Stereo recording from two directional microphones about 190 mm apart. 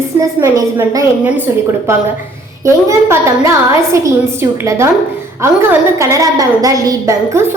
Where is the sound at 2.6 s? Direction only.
15° right (ahead or behind).